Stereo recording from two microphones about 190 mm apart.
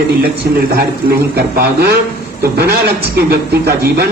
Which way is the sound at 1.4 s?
55° right (ahead or behind).